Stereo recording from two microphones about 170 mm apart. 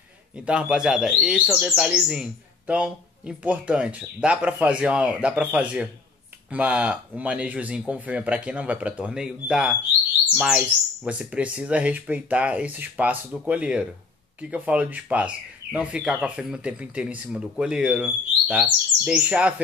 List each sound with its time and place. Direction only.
0.5 s speech: 5° right (ahead or behind)